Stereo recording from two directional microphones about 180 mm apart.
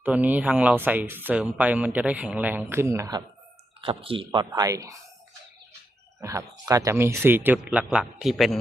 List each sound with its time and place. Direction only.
0.0 s speech: 10° right (ahead or behind)
3.8 s speech: 30° right (ahead or behind)
6.1 s a man's voice: 15° right (ahead or behind); by 8.5 s centre (ahead or behind)